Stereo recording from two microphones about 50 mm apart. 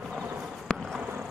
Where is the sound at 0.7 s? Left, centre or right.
Centre.